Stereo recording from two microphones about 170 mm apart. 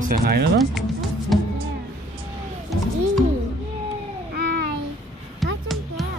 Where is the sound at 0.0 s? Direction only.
60° right (ahead or behind).